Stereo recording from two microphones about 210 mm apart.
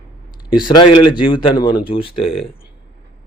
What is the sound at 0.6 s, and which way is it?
A man's voice, 20° left (ahead or behind).